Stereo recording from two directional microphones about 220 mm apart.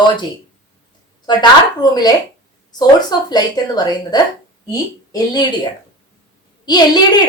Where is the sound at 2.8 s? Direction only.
20° left (ahead or behind).